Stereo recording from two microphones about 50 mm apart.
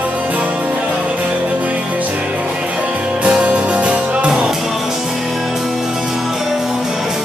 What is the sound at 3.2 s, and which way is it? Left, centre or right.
Music, right.